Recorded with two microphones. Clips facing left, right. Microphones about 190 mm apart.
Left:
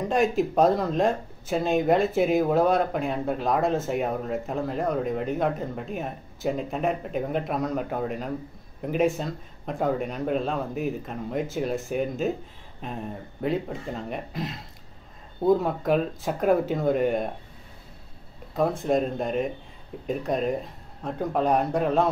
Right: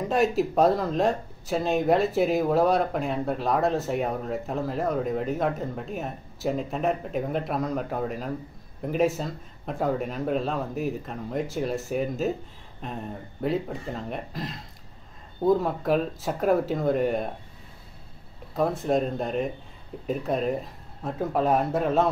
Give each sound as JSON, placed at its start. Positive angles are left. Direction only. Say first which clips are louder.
{"t": 0.0, "sound": "speech", "louder": "even", "side_deg": 0}
{"t": 18.5, "sound": "speech", "louder": "left 1 dB", "side_deg": 0}